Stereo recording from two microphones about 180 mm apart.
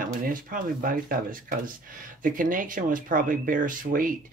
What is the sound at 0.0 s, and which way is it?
Speech, 50° right (ahead or behind).